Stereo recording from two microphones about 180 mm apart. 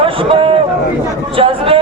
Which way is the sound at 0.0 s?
30° right (ahead or behind).